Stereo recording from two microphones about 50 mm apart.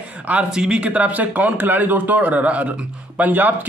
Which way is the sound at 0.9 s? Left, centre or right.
Right.